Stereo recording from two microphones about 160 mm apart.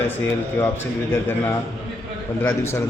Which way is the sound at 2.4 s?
15° left (ahead or behind).